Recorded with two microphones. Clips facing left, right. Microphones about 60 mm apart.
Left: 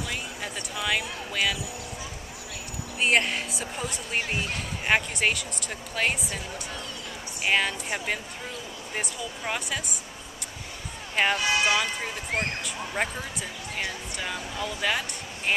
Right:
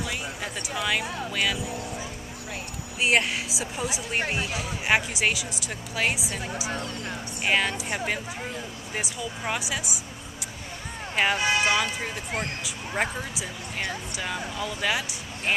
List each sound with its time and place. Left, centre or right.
0.0 s a sound: centre
1.3 s speech: centre
3.0 s speech: centre
6.7 s speech: right
7.4 s speech: centre
8.9 s speech: centre
11.2 s speech: centre